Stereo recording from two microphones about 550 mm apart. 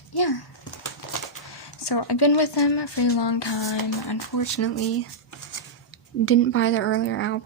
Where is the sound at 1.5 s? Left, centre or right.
Left.